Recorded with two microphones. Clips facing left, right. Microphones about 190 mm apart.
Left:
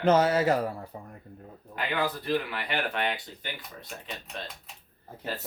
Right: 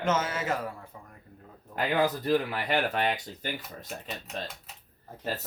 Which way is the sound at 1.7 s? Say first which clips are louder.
Right 4 dB; 40° right (ahead or behind).